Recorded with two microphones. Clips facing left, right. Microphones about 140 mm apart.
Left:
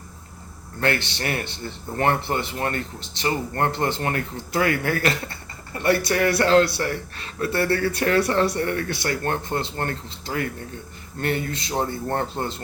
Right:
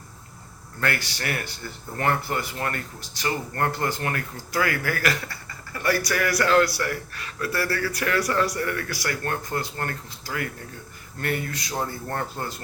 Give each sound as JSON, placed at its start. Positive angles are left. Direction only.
{"t": 0.8, "sound": "speech", "side_deg": 25}